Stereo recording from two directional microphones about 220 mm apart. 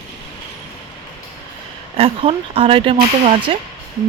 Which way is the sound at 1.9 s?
25° right (ahead or behind).